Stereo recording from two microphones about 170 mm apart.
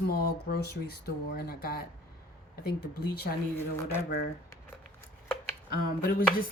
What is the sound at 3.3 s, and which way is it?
Speech, 60° left (ahead or behind).